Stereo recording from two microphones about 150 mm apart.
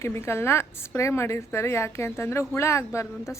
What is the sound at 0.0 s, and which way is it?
A woman's voice, 15° left (ahead or behind).